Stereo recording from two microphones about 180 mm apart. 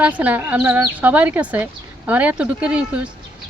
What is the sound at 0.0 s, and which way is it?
Speech, 10° right (ahead or behind).